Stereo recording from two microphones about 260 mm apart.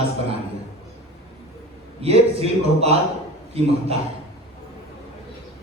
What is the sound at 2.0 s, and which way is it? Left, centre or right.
Speech, right.